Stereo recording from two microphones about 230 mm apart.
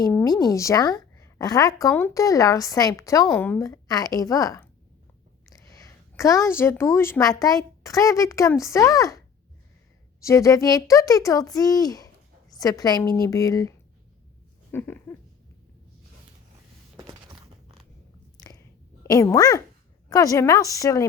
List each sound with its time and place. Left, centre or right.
0.0 s a woman's voice: centre
14.7 s dog: centre
17.0 s a sound: centre
19.0 s a child's voice: centre